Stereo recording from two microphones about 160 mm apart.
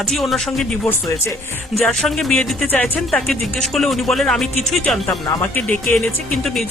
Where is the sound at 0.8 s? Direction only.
20° left (ahead or behind).